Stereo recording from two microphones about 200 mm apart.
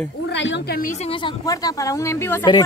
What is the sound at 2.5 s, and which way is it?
Speech, 20° left (ahead or behind).